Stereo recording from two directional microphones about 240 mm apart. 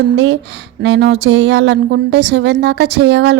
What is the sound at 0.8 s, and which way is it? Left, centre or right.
Speech, right.